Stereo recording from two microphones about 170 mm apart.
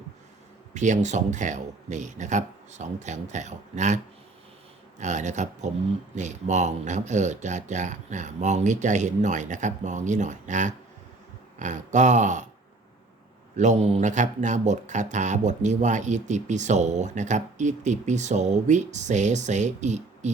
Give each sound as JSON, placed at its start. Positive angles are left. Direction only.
{"t": 0.7, "sound": "speech", "side_deg": -45}
{"t": 13.6, "sound": "speech", "side_deg": -40}